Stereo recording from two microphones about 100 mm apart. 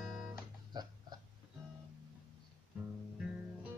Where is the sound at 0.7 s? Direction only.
45° right (ahead or behind).